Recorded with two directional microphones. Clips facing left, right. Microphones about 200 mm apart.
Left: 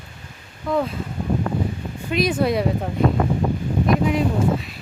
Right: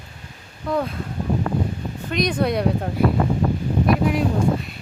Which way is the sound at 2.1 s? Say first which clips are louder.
Left 1 dB; 5° left (ahead or behind).